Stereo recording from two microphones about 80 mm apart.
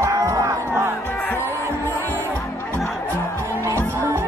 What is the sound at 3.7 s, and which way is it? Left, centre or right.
Music, right.